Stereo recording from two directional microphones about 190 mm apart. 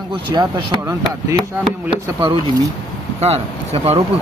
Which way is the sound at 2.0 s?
25° right (ahead or behind).